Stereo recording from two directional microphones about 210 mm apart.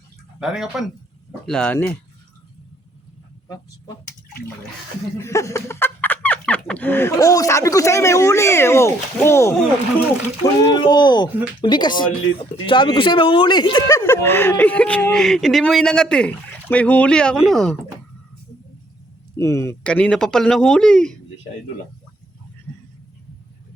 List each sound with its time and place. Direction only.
0.3 s speech: 5° right (ahead or behind)
5.2 s speech: 15° left (ahead or behind)
19.4 s speech: 15° left (ahead or behind)